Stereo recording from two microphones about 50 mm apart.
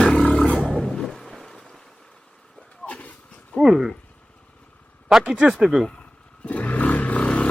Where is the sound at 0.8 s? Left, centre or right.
Centre.